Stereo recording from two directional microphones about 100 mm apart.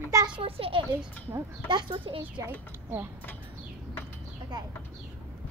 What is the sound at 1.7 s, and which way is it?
Speech, 50° right (ahead or behind).